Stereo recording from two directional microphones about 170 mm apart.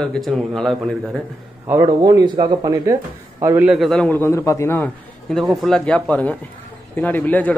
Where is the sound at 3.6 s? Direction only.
Centre (ahead or behind).